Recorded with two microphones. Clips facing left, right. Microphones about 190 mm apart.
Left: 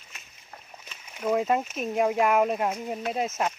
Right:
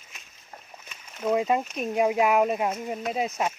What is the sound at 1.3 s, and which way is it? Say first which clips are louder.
Speech: right 1 dB; centre (ahead or behind).